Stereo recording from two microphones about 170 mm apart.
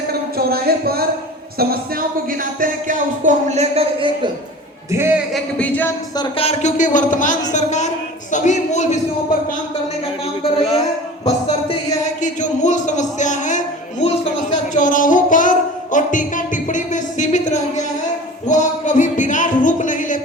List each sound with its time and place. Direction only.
0.1 s a sound: 65° right (ahead or behind)
1.5 s speech: 60° right (ahead or behind); by 4.3 s 35° right (ahead or behind)
4.9 s a man's voice: 15° right (ahead or behind)
5.3 s music: 10° left (ahead or behind)
6.1 s speech: 35° left (ahead or behind)
10.6 s a man's voice: 35° left (ahead or behind)
11.3 s music: 35° left (ahead or behind)
12.2 s a sound: 45° left (ahead or behind)
14.7 s music: 50° left (ahead or behind)
18.4 s a sound: 45° left (ahead or behind)